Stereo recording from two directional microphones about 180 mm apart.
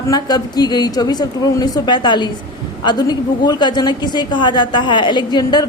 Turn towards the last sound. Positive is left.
turn(degrees=25)  # may be behind; listen again after turning